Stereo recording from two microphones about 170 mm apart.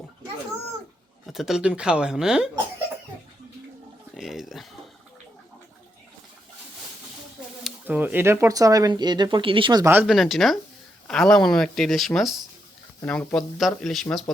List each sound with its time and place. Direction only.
1.3 s speech: centre (ahead or behind)
4.1 s a sound: centre (ahead or behind)
7.6 s speech: 10° right (ahead or behind); by 9.8 s 30° right (ahead or behind)
9.8 s speech: 10° right (ahead or behind)
10.1 s speech: centre (ahead or behind)